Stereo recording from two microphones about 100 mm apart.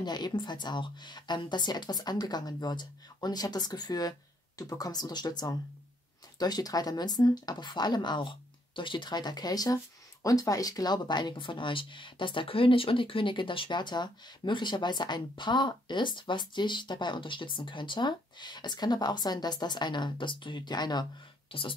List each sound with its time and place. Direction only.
0.0 s speech: 45° left (ahead or behind)
21.5 s speech: 65° left (ahead or behind)